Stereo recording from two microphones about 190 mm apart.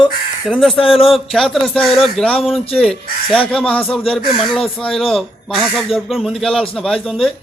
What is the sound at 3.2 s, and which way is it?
Speech, 30° left (ahead or behind).